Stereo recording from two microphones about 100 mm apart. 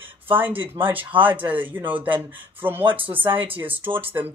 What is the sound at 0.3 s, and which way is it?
Speech, 20° right (ahead or behind).